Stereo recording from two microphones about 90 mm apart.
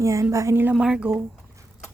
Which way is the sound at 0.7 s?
5° right (ahead or behind).